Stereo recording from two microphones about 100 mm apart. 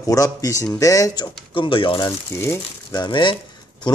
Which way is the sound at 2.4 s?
25° left (ahead or behind).